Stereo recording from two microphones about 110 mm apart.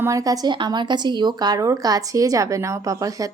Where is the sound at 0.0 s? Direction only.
30° right (ahead or behind).